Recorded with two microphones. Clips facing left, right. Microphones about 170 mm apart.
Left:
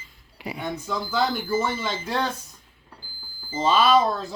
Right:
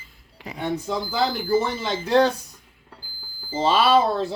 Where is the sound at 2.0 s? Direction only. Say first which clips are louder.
Right 11 dB; 35° right (ahead or behind).